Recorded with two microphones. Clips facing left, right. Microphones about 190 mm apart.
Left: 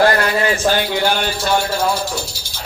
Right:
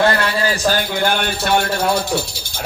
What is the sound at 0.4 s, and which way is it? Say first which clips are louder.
A man's voice: left 1 dB; 40° right (ahead or behind).